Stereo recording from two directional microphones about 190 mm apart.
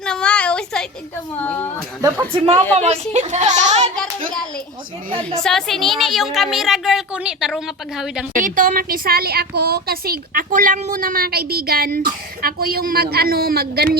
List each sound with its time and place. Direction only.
0.0 s a sound: 5° left (ahead or behind)
1.4 s a woman's voice: 10° left (ahead or behind)
2.0 s speech: 15° right (ahead or behind)
2.7 s speech: 35° right (ahead or behind)
5.4 s a woman's voice: 5° left (ahead or behind)
8.3 s speech: 45° right (ahead or behind)